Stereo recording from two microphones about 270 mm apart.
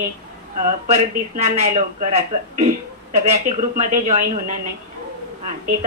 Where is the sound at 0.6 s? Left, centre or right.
Right.